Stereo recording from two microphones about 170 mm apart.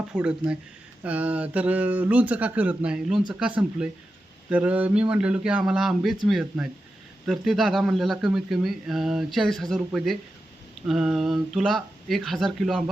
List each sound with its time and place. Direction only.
0.1 s speech: 5° right (ahead or behind)